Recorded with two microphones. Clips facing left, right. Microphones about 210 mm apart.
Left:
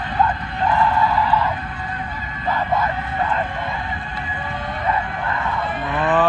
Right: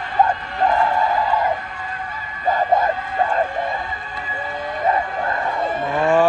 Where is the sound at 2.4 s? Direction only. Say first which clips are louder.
Right 3 dB; 45° right (ahead or behind).